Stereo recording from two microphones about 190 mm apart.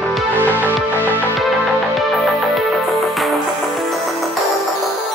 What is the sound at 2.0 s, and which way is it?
Music, centre (ahead or behind).